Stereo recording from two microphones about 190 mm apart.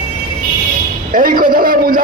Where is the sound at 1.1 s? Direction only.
45° right (ahead or behind).